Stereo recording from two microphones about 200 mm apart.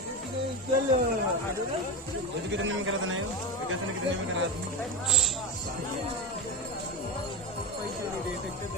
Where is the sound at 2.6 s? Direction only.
80° right.